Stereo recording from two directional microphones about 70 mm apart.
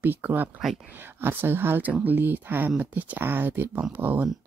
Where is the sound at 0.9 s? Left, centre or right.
Right.